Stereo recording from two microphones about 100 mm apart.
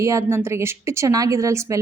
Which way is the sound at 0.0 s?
30° right (ahead or behind).